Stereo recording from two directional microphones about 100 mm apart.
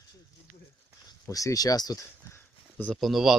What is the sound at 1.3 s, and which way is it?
Speech, 35° left (ahead or behind).